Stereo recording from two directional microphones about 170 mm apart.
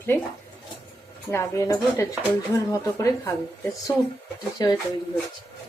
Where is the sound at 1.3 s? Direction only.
15° left (ahead or behind).